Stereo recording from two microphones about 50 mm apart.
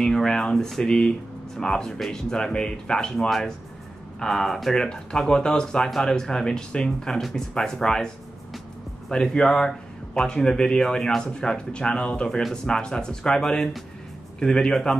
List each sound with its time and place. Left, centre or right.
0.0 s speech: centre
4.7 s speech: centre
9.1 s speech: centre
11.3 s speech: centre